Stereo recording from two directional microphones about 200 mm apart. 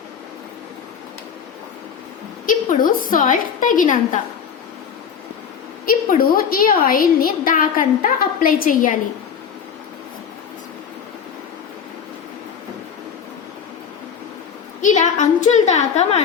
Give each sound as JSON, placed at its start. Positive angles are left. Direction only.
{"t": 2.5, "sound": "a woman's voice", "side_deg": 45}
{"t": 5.8, "sound": "a woman's voice", "side_deg": 45}
{"t": 14.8, "sound": "a woman's voice", "side_deg": 40}